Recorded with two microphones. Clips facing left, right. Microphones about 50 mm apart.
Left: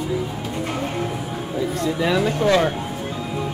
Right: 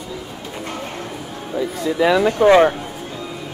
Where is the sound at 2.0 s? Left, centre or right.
Centre.